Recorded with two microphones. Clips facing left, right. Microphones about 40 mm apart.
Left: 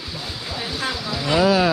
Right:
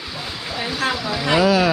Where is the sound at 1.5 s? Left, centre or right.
Right.